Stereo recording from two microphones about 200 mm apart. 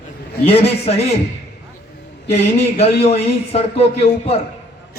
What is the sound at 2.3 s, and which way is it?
A man's voice, 30° left (ahead or behind).